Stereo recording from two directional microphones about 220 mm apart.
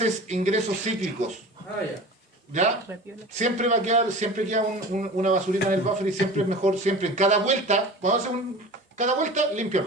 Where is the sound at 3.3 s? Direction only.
30° right (ahead or behind).